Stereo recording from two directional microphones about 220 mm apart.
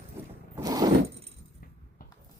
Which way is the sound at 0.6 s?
15° right (ahead or behind).